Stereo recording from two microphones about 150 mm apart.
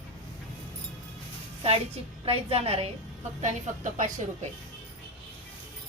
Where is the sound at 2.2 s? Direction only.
40° right (ahead or behind).